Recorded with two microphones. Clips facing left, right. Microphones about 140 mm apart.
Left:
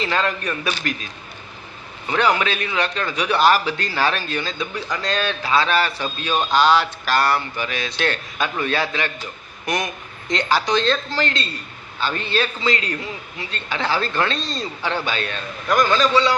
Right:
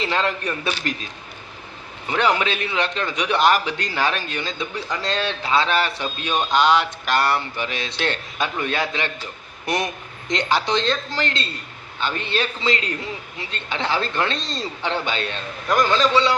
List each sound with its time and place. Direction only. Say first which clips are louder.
0.0 s a man's voice: even; 20° right (ahead or behind)
2.4 s a man's voice: left 1 dB; 25° right (ahead or behind)